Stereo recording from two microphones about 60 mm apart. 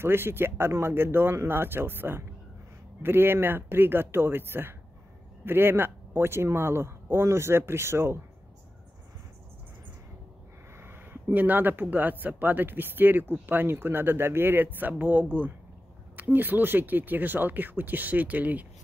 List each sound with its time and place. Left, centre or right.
0.0 s speech: right
10.8 s speech: right